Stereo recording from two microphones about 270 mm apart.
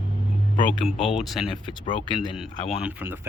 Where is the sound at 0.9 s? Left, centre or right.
Centre.